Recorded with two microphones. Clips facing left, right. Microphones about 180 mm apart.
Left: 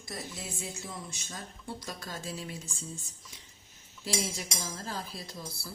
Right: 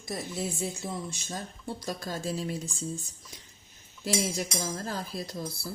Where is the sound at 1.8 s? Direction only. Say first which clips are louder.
Right 6 dB; 35° right (ahead or behind).